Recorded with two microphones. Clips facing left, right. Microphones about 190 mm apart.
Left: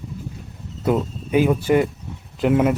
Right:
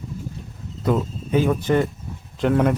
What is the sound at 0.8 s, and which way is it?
Speech, 10° left (ahead or behind).